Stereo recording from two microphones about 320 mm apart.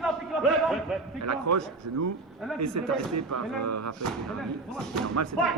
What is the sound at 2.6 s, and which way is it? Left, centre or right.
Speech, right.